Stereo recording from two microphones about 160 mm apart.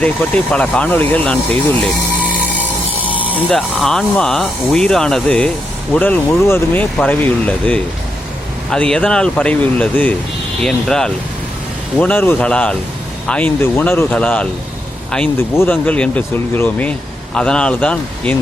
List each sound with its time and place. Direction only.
0.0 s speech: 5° left (ahead or behind)
3.0 s music: 10° right (ahead or behind)
3.5 s speech: 5° left (ahead or behind)